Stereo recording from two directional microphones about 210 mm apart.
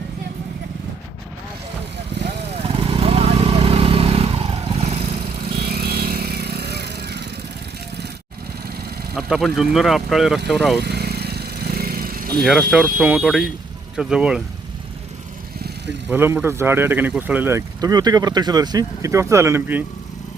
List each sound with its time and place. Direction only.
2.5 s vehicle: 30° right (ahead or behind)
5.5 s vehicle: 50° right (ahead or behind)
9.1 s speech: centre (ahead or behind)
10.8 s vehicle: 50° right (ahead or behind)
12.4 s speech: centre (ahead or behind)
16.0 s speech: 10° right (ahead or behind)